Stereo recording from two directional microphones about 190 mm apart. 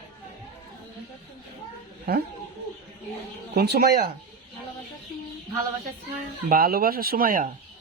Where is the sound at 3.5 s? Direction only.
55° right (ahead or behind).